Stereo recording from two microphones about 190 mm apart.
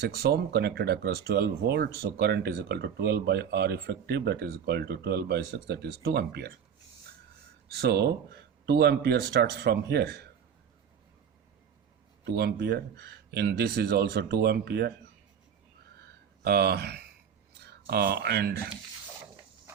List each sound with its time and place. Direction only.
0.0 s speech: 60° right (ahead or behind)
7.8 s speech: 60° right (ahead or behind)
12.2 s speech: 60° right (ahead or behind)
16.0 s a sound: 55° right (ahead or behind)
17.6 s speech: 60° right (ahead or behind)